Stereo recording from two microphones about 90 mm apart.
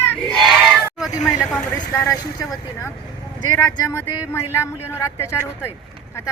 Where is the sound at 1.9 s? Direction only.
40° left (ahead or behind).